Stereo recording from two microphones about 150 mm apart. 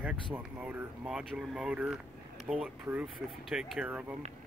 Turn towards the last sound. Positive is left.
turn(degrees=-5)  # may be behind; listen again after turning